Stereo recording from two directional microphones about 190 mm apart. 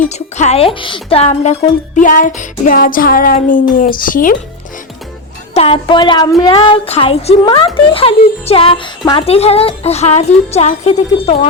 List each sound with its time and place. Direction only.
0.0 s speech: 35° left (ahead or behind)
2.0 s music: 45° left (ahead or behind)
5.5 s a sound: 30° left (ahead or behind)
7.4 s speech: 25° left (ahead or behind)